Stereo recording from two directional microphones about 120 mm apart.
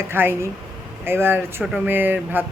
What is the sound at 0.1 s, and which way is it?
Speech, 20° right (ahead or behind).